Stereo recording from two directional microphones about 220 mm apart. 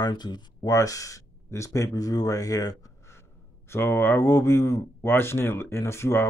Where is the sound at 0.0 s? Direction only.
20° left (ahead or behind).